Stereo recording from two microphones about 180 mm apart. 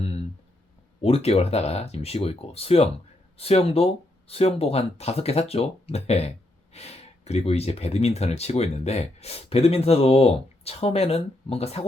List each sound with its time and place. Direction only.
1.0 s speech: 35° left (ahead or behind)